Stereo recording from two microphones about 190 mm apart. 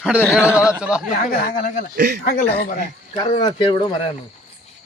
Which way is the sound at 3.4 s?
25° left (ahead or behind).